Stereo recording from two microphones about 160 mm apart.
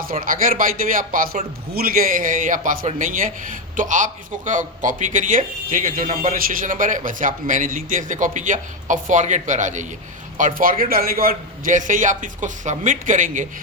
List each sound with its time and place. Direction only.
0.0 s a man's voice: 60° right (ahead or behind)